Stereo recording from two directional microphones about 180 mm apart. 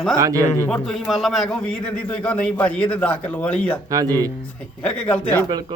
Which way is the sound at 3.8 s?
20° right (ahead or behind).